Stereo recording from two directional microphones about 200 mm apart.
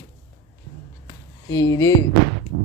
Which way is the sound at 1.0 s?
15° left (ahead or behind).